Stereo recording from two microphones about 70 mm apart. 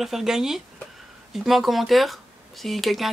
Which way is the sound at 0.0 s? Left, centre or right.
Centre.